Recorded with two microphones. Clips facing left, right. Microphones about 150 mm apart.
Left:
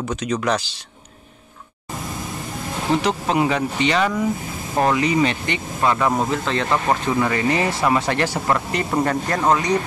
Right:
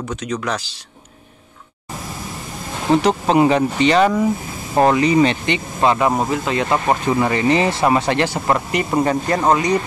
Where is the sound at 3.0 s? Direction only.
30° right (ahead or behind); by 9.7 s 10° right (ahead or behind).